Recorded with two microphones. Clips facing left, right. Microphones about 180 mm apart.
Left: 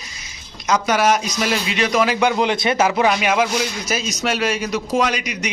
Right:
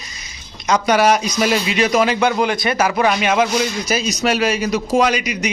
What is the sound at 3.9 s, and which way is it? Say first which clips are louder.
A man's voice: right 4 dB; centre (ahead or behind).